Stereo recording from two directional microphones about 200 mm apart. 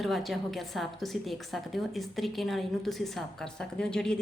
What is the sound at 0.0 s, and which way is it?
A woman's voice, centre (ahead or behind).